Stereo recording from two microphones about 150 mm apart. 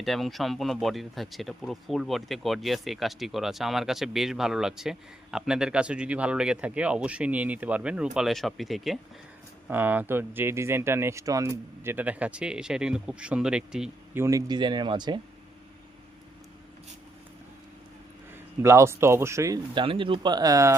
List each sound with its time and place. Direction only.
0.0 s speech: centre (ahead or behind)
9.6 s speech: 10° right (ahead or behind)
14.2 s speech: 20° right (ahead or behind)
18.6 s speech: 15° right (ahead or behind)
19.7 s speech: 35° right (ahead or behind)